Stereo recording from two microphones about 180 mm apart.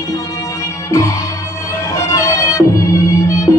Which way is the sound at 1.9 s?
15° left (ahead or behind).